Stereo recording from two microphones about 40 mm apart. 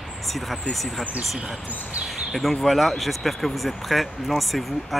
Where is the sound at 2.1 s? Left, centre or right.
Centre.